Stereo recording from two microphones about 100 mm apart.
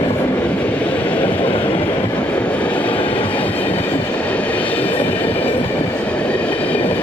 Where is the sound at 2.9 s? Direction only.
65° left (ahead or behind).